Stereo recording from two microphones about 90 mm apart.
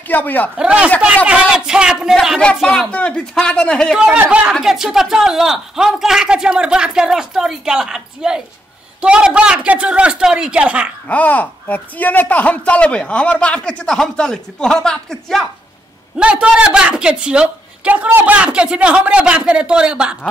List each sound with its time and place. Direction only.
0.1 s a man's voice: 20° left (ahead or behind)
0.6 s a woman's voice: 10° right (ahead or behind)
2.6 s speech: 10° left (ahead or behind)
3.9 s a woman's voice: 5° right (ahead or behind)
4.6 s a woman's voice: 5° right (ahead or behind)
11.1 s speech: 15° left (ahead or behind)
16.2 s a woman's voice: 10° right (ahead or behind)